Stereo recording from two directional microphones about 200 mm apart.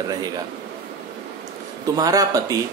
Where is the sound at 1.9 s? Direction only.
15° right (ahead or behind).